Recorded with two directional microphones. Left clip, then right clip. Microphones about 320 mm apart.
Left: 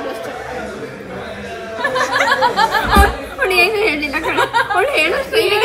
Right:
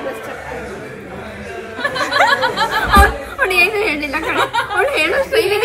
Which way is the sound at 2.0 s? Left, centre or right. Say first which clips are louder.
Right 1 dB; centre.